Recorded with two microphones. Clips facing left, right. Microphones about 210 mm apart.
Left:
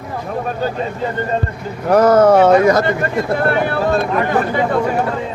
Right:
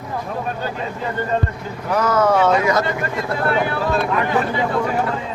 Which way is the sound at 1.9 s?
50° left (ahead or behind).